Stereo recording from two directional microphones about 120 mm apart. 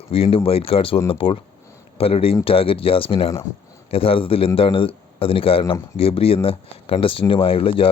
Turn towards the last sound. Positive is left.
turn(degrees=50)  # may be behind; listen again after turning